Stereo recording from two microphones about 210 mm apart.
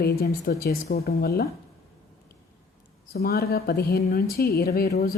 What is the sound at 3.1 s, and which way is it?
Speech, 45° left (ahead or behind).